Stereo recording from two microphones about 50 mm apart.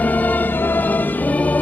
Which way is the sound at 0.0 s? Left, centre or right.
Left.